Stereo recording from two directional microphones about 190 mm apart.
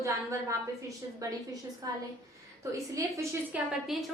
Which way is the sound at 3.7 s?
Centre (ahead or behind).